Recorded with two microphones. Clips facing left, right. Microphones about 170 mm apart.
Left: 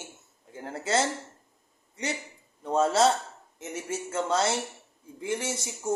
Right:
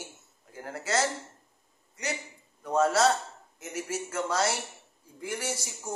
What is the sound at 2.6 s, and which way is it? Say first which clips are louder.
Speech: left 1 dB; 25° left (ahead or behind).